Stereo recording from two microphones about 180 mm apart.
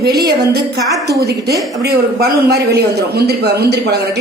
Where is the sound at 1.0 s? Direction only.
65° right (ahead or behind).